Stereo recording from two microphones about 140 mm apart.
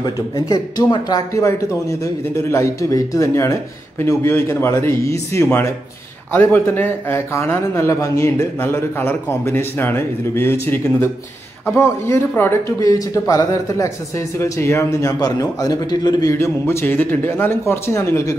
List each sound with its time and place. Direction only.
0.0 s a man's voice: 30° left (ahead or behind)